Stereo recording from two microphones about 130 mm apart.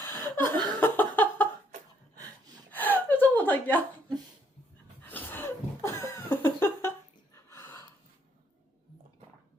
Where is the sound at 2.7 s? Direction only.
15° left (ahead or behind).